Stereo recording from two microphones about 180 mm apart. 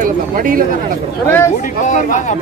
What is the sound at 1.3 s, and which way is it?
Speech, 10° left (ahead or behind).